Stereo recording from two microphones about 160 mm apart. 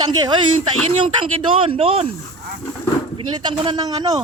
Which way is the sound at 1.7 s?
35° right (ahead or behind).